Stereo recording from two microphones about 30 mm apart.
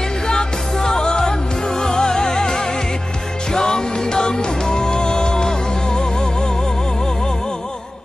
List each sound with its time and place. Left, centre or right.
0.3 s music: left